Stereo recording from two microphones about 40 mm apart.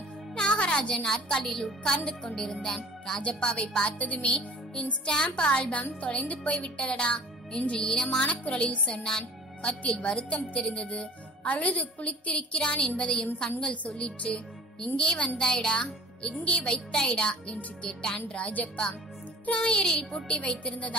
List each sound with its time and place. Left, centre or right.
0.3 s a child's voice: left
3.2 s a child's voice: left
8.2 s a child's voice: left
11.4 s a child's voice: left
15.3 s a child's voice: centre
19.6 s speech: left
20.3 s a child's voice: left